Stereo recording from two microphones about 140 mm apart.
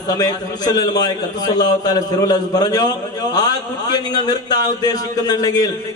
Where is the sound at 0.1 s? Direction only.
25° left (ahead or behind).